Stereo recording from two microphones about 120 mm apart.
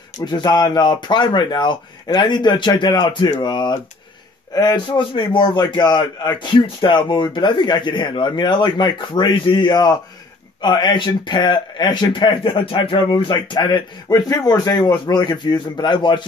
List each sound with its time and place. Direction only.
0.2 s a man's voice: 35° left (ahead or behind)